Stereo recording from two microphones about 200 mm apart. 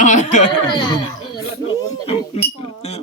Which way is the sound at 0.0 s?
35° left (ahead or behind).